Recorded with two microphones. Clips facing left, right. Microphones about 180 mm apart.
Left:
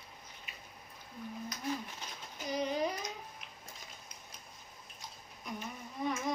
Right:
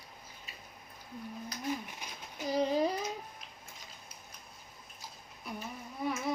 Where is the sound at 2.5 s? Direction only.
35° right (ahead or behind).